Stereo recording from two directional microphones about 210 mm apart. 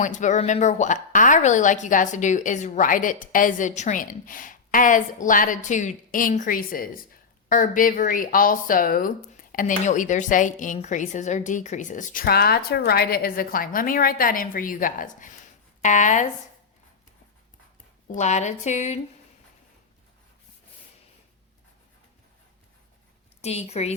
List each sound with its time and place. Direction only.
0.0 s a woman's voice: 35° left (ahead or behind)
18.1 s a woman's voice: 35° left (ahead or behind)
23.4 s a woman's voice: 30° left (ahead or behind)